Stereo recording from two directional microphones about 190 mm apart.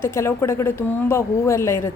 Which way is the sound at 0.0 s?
15° left (ahead or behind).